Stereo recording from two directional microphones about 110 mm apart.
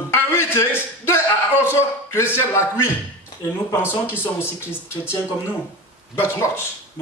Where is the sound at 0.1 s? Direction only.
20° left (ahead or behind).